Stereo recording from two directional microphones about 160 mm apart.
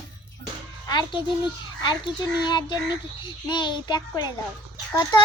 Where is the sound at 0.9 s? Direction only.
25° left (ahead or behind).